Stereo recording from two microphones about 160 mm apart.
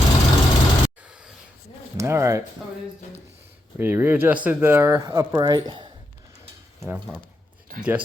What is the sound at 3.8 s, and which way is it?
Speech, 15° right (ahead or behind).